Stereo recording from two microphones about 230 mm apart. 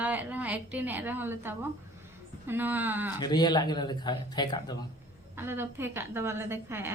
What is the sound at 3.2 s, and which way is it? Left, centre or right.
Speech, centre.